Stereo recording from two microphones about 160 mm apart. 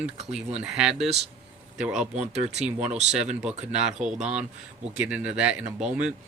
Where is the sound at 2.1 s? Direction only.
45° right (ahead or behind).